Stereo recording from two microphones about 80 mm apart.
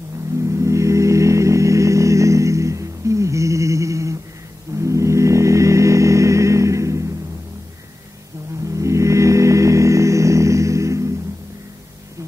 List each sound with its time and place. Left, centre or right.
0.4 s music: right
8.6 s music: right